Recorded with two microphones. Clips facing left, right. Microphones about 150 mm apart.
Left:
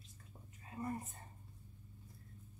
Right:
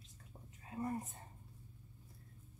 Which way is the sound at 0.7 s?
15° right (ahead or behind).